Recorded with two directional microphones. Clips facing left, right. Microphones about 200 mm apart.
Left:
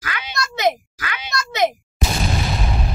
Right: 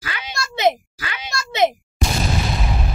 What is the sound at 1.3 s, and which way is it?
Speech, 25° right (ahead or behind).